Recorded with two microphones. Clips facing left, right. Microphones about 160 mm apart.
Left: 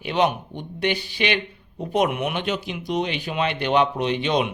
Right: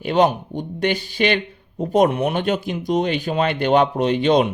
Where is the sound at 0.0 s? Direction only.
45° right (ahead or behind).